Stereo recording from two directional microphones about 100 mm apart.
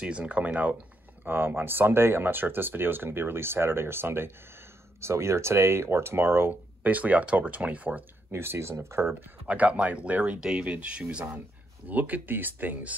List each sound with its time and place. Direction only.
0.0 s speech: 10° right (ahead or behind); by 9.1 s 25° right (ahead or behind)
9.5 s speech: 10° right (ahead or behind)